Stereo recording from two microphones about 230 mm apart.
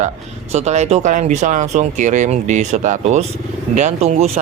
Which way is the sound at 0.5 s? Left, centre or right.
Right.